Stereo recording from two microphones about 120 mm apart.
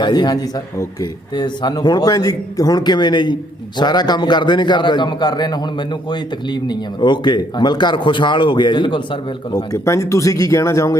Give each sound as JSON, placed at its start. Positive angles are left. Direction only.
{"t": 0.0, "sound": "a man's voice", "side_deg": 35}
{"t": 9.7, "sound": "speech", "side_deg": 25}